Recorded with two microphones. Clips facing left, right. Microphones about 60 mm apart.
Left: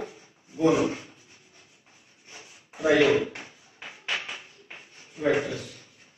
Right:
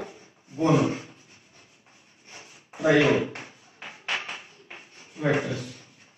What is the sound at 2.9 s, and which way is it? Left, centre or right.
Speech, centre.